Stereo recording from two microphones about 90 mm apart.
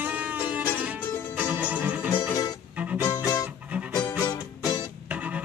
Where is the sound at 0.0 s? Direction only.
15° right (ahead or behind).